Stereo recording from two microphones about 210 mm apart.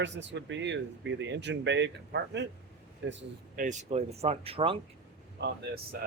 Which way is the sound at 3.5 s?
35° right (ahead or behind).